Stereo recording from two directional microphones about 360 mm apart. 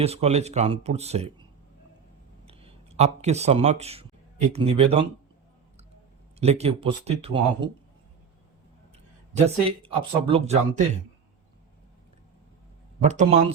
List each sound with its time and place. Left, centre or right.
0.0 s speech: centre
2.5 s speech: centre
6.4 s speech: centre
9.3 s speech: centre
13.0 s speech: centre